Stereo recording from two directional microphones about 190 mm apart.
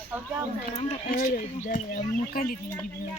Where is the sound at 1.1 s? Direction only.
45° left (ahead or behind).